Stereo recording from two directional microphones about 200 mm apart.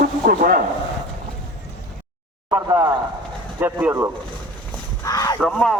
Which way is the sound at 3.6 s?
10° right (ahead or behind).